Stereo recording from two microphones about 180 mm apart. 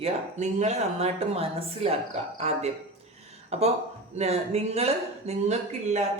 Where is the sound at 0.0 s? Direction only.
40° right (ahead or behind).